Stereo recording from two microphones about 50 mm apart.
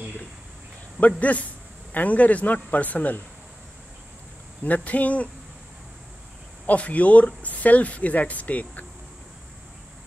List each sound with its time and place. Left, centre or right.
1.0 s a man's voice: left
4.6 s speech: left
6.6 s speech: left